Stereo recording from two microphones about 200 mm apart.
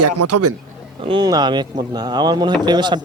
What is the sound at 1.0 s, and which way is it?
Speech, 25° right (ahead or behind).